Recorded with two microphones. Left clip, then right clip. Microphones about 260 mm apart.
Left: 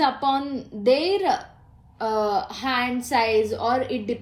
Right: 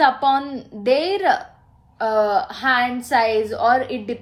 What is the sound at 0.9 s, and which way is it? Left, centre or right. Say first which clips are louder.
Speech: right 2 dB; centre.